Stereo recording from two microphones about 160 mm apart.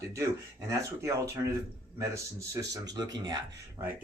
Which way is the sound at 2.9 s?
25° right (ahead or behind).